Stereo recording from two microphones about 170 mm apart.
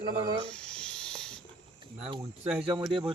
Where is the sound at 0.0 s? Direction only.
30° right (ahead or behind).